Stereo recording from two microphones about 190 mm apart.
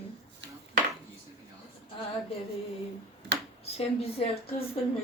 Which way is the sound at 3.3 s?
65° right (ahead or behind).